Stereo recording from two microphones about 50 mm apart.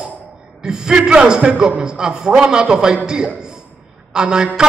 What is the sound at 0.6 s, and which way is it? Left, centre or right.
A man's voice, centre.